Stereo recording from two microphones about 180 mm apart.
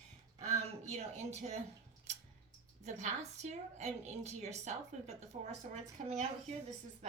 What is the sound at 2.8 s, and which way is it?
Speech, 40° right (ahead or behind).